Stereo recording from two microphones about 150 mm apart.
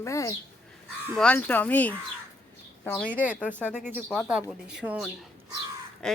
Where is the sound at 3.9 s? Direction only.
10° right (ahead or behind).